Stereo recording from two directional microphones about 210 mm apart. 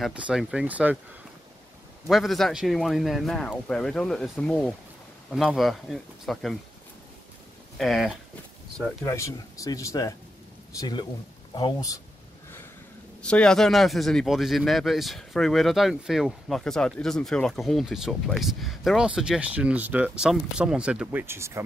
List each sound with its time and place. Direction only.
0.0 s speech: centre (ahead or behind)
2.0 s speech: centre (ahead or behind)
7.7 s speech: centre (ahead or behind)
9.0 s speech: 15° left (ahead or behind)
13.2 s speech: 5° left (ahead or behind); by 21.6 s 15° right (ahead or behind)